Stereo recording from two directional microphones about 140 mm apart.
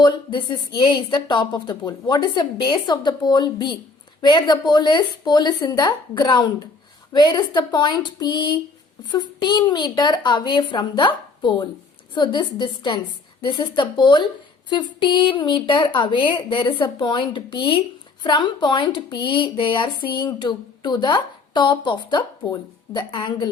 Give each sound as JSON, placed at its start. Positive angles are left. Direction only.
{"t": 0.0, "sound": "speech", "side_deg": 30}